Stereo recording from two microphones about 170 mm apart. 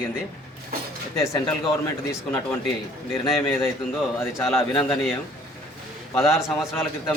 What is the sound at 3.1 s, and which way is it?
A man's voice, 15° left (ahead or behind).